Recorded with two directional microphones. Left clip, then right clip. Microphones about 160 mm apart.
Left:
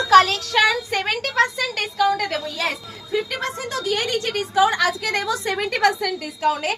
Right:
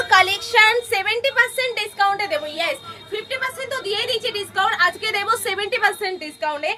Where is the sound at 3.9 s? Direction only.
20° right (ahead or behind).